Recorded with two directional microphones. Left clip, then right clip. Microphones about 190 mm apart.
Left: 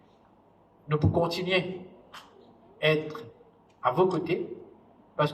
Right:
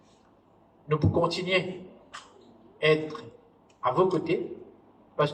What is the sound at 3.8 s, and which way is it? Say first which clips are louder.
Speech: even; 15° left (ahead or behind).